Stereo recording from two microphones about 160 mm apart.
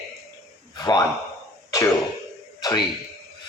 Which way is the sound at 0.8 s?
25° left (ahead or behind).